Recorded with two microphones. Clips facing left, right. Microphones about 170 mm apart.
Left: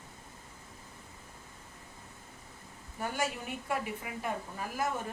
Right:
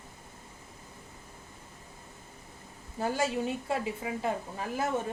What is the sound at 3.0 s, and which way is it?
A woman's voice, 30° right (ahead or behind).